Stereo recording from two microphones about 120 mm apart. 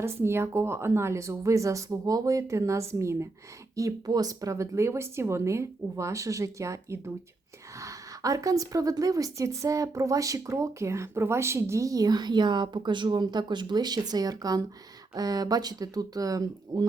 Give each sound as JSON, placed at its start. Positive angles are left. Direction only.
{"t": 0.0, "sound": "a woman's voice", "side_deg": -20}